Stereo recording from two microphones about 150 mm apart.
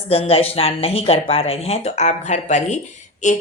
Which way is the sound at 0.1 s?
40° left (ahead or behind).